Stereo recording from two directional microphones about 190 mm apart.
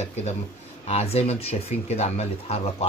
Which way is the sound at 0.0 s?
35° left (ahead or behind).